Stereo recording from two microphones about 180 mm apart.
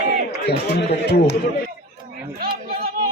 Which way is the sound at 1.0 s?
65° left (ahead or behind).